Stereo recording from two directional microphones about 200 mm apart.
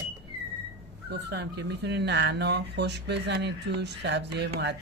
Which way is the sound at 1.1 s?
55° right (ahead or behind).